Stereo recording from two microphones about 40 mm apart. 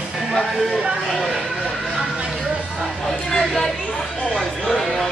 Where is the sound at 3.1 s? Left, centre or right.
Centre.